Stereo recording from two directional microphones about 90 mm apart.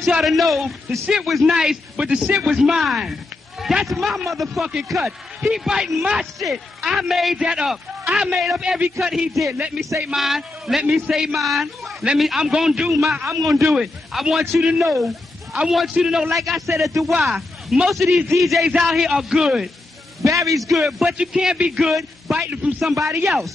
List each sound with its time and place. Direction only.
0.1 s a man's voice: centre (ahead or behind)
20.2 s a man's voice: 35° right (ahead or behind)
20.7 s a man's voice: 5° right (ahead or behind)